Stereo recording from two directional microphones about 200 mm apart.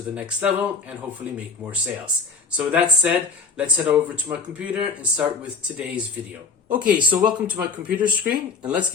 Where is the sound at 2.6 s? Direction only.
5° right (ahead or behind).